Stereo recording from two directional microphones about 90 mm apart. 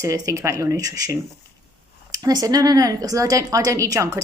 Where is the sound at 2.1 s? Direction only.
45° right (ahead or behind).